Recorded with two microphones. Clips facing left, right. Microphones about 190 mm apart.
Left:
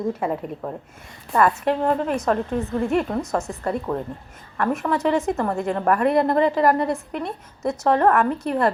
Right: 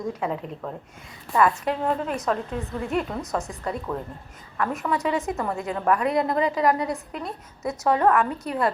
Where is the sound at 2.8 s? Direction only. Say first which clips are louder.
Left 5 dB; 50° left (ahead or behind).